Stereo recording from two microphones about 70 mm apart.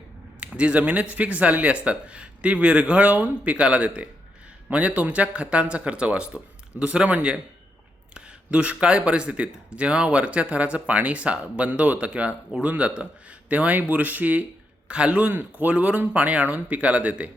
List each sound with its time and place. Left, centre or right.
0.3 s a man's voice: centre